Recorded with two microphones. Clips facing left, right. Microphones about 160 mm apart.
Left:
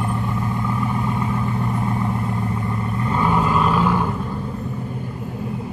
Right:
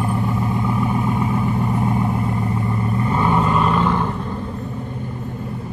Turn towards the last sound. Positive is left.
turn(degrees=5)  # may be behind; listen again after turning